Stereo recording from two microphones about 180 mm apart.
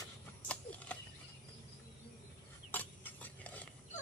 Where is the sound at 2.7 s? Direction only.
10° left (ahead or behind).